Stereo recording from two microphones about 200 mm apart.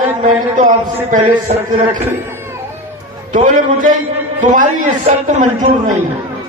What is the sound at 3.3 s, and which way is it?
A man's voice, 40° right (ahead or behind).